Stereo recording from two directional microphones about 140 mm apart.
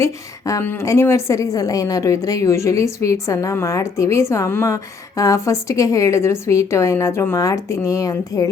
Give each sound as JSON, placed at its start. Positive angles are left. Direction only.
{"t": 0.0, "sound": "a woman's voice", "side_deg": 20}